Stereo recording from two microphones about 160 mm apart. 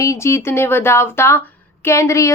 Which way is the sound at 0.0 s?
20° left (ahead or behind).